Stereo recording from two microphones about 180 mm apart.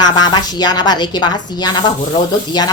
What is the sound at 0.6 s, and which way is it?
A woman's voice, 25° left (ahead or behind).